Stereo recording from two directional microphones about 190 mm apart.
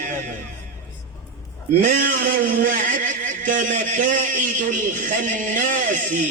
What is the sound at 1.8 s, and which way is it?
A man's voice, 45° right (ahead or behind).